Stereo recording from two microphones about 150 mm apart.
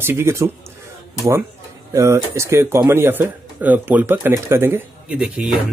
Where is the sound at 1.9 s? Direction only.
20° right (ahead or behind).